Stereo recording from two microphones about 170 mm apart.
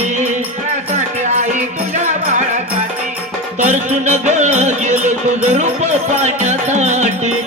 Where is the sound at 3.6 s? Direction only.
45° right (ahead or behind).